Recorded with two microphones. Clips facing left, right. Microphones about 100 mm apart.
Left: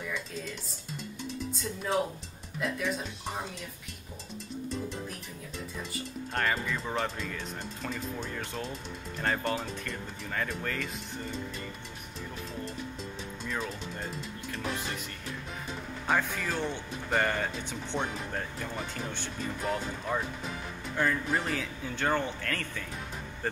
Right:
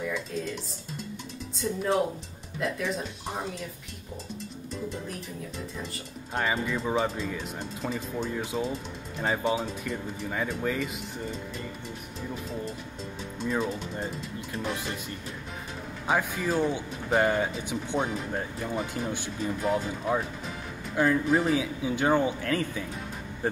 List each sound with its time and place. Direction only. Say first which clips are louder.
0.0 s music: right 5 dB; centre (ahead or behind)
1.5 s speech: right 6 dB; centre (ahead or behind)
6.3 s speech: right 3 dB; 5° right (ahead or behind)
13.4 s speech: right 7 dB; 15° right (ahead or behind)
16.1 s speech: right 3 dB; 10° right (ahead or behind)